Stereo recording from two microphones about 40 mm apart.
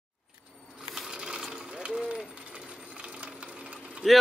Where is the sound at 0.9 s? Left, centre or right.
Centre.